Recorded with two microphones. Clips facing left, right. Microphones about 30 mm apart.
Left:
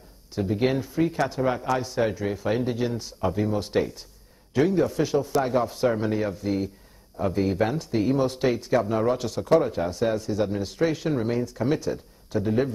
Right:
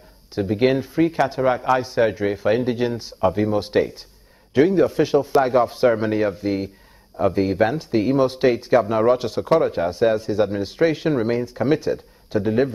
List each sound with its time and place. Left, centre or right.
0.3 s a man's voice: right